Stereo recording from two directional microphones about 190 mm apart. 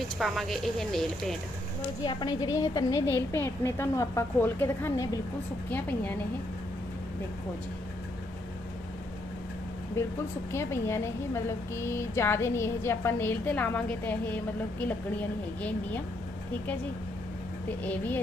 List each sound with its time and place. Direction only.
0.2 s speech: centre (ahead or behind)
2.0 s a woman's voice: 25° left (ahead or behind)
10.5 s a woman's voice: 15° left (ahead or behind)
17.7 s a woman's voice: 10° left (ahead or behind)